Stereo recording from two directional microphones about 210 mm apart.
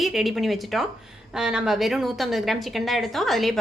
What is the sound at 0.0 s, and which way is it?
Speech, centre (ahead or behind).